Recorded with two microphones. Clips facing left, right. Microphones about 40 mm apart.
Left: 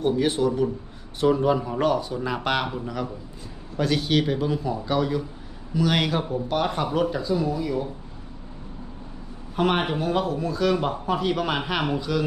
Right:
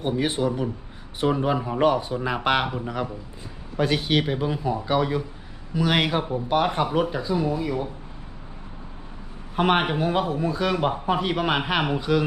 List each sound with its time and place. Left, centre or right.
0.0 s speech: centre
9.6 s speech: right